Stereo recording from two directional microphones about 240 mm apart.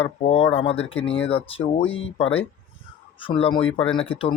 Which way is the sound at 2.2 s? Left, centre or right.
Left.